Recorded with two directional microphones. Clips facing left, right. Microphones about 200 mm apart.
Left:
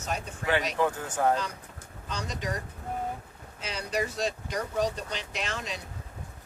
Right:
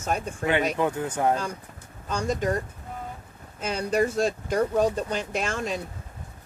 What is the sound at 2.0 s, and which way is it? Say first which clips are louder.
Speech: right 9 dB; 50° right (ahead or behind).